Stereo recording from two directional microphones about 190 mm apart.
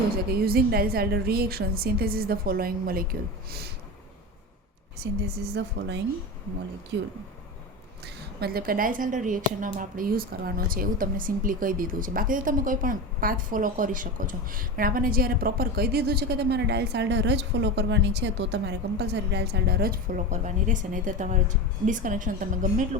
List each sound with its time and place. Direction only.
0.3 s speech: 55° right (ahead or behind)
5.0 s a woman's voice: 65° right (ahead or behind)
6.9 s speech: 65° right (ahead or behind)
8.0 s speech: 55° right (ahead or behind)